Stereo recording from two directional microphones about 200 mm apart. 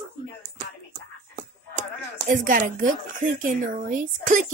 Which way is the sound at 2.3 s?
40° right (ahead or behind).